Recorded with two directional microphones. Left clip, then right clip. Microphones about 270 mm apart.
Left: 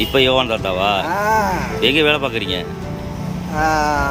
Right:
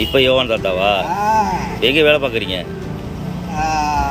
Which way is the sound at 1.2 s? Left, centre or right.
Centre.